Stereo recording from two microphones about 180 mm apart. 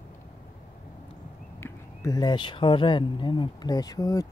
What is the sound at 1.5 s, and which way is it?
Speech, 15° left (ahead or behind).